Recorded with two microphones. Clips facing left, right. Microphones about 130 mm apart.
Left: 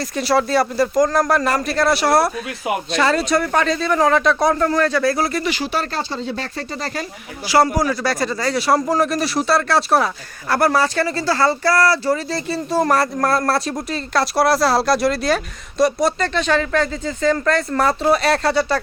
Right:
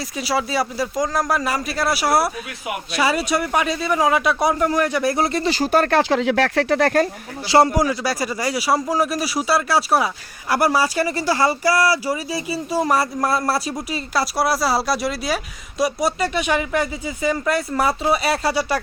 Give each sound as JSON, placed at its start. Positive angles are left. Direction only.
{"t": 0.0, "sound": "a man's voice", "side_deg": -5}
{"t": 6.0, "sound": "speech", "side_deg": -90}
{"t": 7.4, "sound": "speech", "side_deg": -25}
{"t": 7.8, "sound": "a man's voice", "side_deg": -10}